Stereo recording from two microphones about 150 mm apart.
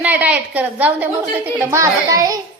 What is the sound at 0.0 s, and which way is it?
A woman's voice, 10° right (ahead or behind).